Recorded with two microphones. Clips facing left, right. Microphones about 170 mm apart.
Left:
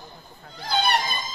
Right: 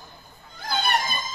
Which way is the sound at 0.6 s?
50° right (ahead or behind).